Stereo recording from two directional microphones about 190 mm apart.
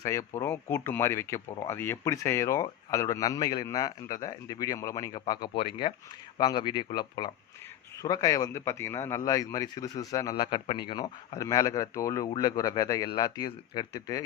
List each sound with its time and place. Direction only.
0.0 s speech: 15° left (ahead or behind)